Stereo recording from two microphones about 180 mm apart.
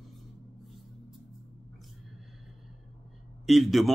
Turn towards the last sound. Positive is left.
turn(degrees=0)  # may be behind; listen again after turning